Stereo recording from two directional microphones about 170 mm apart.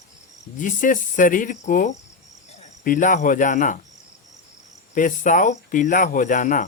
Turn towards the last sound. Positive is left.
turn(degrees=50)  # may be behind; listen again after turning